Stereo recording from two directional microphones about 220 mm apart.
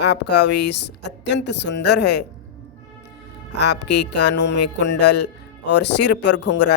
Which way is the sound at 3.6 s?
50° left (ahead or behind).